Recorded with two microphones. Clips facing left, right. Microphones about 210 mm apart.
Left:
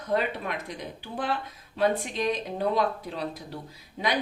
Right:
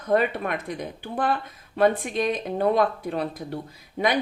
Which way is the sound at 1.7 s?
55° right (ahead or behind).